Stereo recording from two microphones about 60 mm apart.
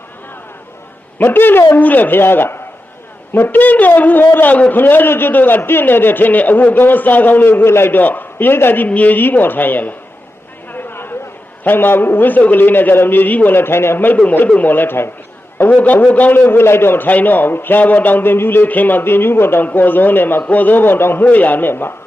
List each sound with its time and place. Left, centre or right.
1.2 s a man's voice: left
10.7 s a sound: left
11.6 s a man's voice: left
15.8 s a man's voice: left